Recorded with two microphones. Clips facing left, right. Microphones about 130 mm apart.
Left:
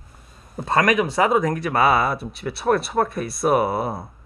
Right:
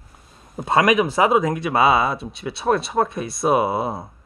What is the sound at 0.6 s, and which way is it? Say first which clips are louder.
Speech: right 2 dB; 15° right (ahead or behind).